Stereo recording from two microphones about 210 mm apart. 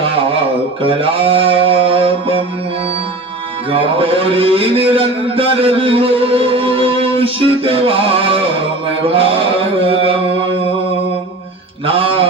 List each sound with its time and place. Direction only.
0.8 s music: 25° right (ahead or behind)
3.7 s a man's voice: 25° right (ahead or behind)
9.0 s mantra: 25° right (ahead or behind)
11.9 s a sound: 25° right (ahead or behind)